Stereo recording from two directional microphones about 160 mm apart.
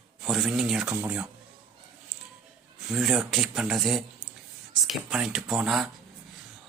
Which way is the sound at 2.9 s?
Centre (ahead or behind).